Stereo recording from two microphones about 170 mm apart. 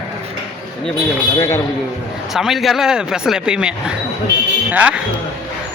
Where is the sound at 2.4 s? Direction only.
Centre (ahead or behind).